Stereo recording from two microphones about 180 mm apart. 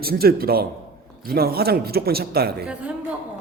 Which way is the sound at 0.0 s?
60° right (ahead or behind).